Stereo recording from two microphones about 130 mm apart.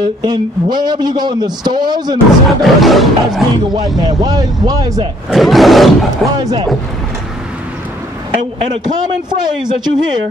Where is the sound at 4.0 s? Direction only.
35° right (ahead or behind).